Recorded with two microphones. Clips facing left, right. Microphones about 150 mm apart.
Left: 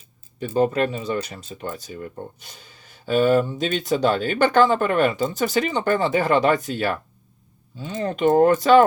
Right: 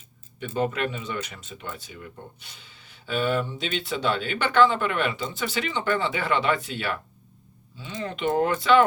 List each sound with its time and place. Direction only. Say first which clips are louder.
0.3 s speech: left 7 dB; 35° left (ahead or behind)